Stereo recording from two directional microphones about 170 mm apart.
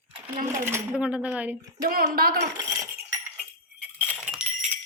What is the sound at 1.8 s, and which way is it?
Speech, 60° right (ahead or behind).